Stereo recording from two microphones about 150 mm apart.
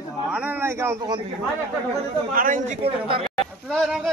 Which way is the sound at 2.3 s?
65° right (ahead or behind).